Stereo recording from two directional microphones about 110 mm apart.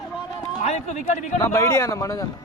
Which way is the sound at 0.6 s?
90° left.